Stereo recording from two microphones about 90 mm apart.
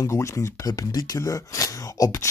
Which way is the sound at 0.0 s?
35° left (ahead or behind).